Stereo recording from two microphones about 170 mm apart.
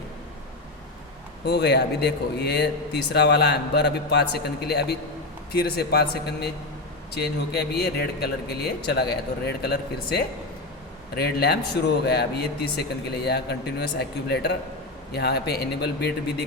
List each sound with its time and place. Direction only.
1.5 s a man's voice: 75° left (ahead or behind)